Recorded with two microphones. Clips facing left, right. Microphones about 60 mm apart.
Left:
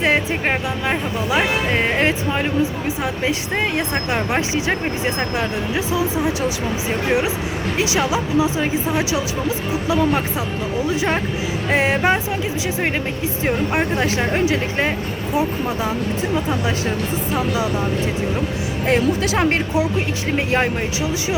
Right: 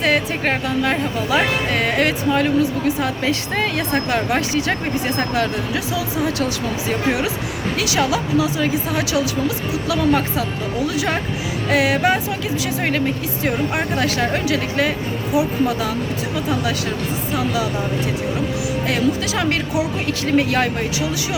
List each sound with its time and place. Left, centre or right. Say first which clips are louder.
0.0 s speech: even; centre
7.8 s speech: even; left
11.7 s speech: right 1 dB; left
13.9 s speech: even; centre
18.9 s speech: left 4 dB; left